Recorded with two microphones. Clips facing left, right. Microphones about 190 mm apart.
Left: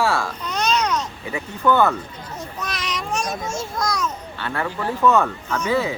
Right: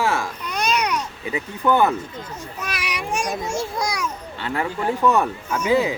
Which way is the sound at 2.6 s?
10° right (ahead or behind).